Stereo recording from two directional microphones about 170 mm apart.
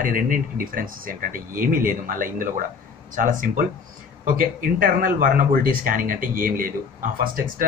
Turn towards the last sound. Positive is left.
turn(degrees=-60)  # may be behind; listen again after turning